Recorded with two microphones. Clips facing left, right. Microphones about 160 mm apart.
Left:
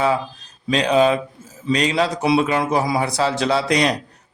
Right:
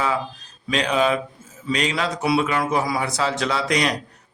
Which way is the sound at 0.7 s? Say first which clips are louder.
Left 4 dB; 35° left (ahead or behind).